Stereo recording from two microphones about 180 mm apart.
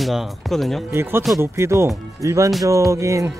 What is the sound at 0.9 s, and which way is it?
Speech, 15° right (ahead or behind).